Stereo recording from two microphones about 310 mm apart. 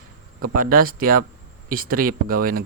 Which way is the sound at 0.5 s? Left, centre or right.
Right.